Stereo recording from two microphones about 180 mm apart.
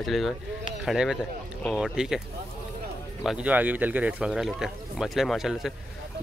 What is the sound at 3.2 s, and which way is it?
Speech, 5° right (ahead or behind).